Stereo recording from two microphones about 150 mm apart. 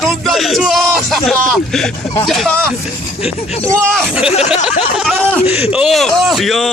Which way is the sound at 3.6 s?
10° left (ahead or behind).